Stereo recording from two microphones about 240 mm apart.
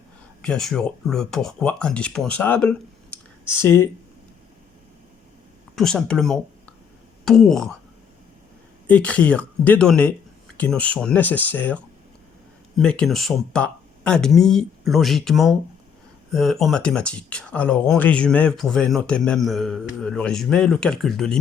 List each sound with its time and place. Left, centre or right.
0.4 s speech: centre
5.7 s speech: centre
8.9 s speech: centre